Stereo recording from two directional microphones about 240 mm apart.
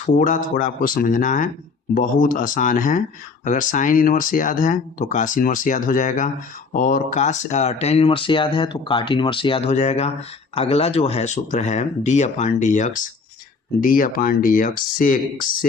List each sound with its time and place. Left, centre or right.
0.0 s speech: left